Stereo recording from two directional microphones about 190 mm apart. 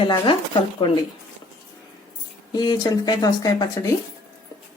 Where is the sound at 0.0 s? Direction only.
25° left (ahead or behind).